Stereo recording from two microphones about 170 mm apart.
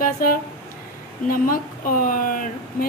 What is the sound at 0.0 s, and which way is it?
Speech, 55° left (ahead or behind).